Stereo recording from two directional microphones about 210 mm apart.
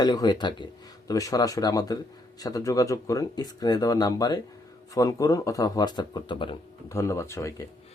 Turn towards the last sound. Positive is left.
turn(degrees=15)  # may be behind; listen again after turning